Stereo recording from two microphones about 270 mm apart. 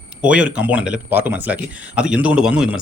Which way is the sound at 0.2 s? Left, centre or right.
Centre.